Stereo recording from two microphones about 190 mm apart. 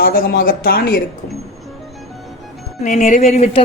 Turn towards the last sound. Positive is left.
turn(degrees=35)  # may be behind; listen again after turning